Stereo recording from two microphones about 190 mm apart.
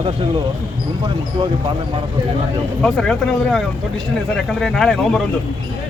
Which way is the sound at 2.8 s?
5° left (ahead or behind).